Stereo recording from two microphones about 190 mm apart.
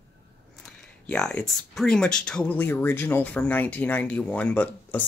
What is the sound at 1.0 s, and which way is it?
Speech, 5° left (ahead or behind).